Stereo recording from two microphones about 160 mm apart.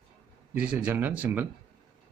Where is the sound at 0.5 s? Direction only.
10° right (ahead or behind).